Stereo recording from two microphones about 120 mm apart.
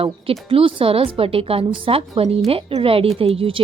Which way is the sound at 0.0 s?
50° right (ahead or behind).